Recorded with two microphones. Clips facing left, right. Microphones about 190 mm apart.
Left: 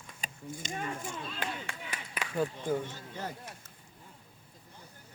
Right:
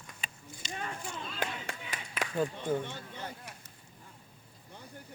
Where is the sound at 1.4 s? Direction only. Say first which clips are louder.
Right 4 dB; 40° right (ahead or behind).